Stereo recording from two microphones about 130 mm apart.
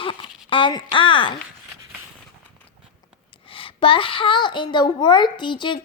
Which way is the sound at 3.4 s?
45° left (ahead or behind).